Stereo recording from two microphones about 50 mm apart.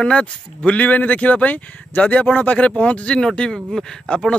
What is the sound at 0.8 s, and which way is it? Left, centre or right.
Speech, left.